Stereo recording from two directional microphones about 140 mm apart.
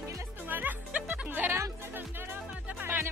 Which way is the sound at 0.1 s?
20° right (ahead or behind).